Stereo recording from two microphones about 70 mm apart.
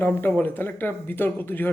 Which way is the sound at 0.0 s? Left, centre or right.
Left.